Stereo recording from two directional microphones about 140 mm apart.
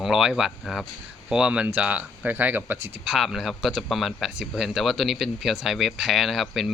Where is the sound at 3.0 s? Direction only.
5° right (ahead or behind).